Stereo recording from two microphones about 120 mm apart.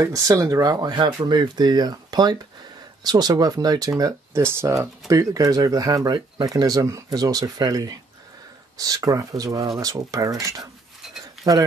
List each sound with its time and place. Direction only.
0.0 s speech: 25° right (ahead or behind)